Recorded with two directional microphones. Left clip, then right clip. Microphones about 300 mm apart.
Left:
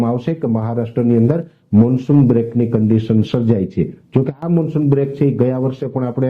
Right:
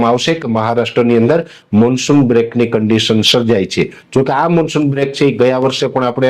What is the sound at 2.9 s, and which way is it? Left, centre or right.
Speech, centre.